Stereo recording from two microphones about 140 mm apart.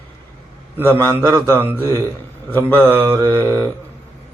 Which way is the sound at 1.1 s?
20° right (ahead or behind).